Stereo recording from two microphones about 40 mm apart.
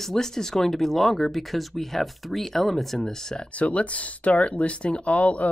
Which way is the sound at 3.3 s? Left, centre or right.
Left.